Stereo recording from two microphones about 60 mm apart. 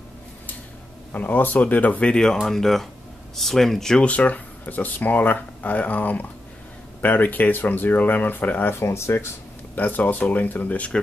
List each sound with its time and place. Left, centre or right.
1.1 s speech: left
2.4 s speech: centre
4.0 s speech: left
8.7 s speech: left
9.8 s speech: left